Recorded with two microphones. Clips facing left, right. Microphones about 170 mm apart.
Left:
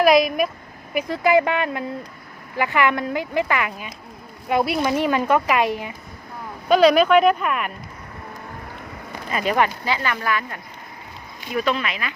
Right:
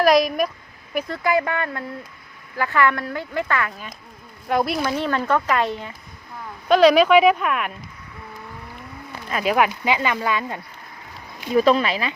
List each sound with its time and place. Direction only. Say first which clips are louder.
0.0 s speech: left 1 dB; 5° left (ahead or behind)
0.9 s a woman's voice: left 4 dB; 20° left (ahead or behind)
4.4 s a woman's voice: left 1 dB; 5° left (ahead or behind)
9.3 s speech: right 1 dB; centre (ahead or behind)
9.8 s speech: right 2 dB; 15° right (ahead or behind)
11.5 s speech: right 6 dB; 35° right (ahead or behind)